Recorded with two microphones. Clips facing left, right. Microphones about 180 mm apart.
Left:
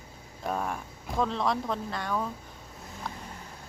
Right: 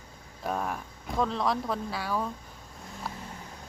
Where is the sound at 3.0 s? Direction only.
5° right (ahead or behind).